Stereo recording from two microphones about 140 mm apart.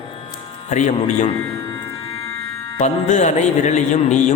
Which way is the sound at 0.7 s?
60° left (ahead or behind).